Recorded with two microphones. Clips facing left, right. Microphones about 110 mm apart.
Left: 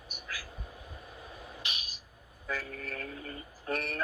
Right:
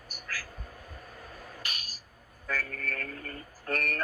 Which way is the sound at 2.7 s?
20° left (ahead or behind).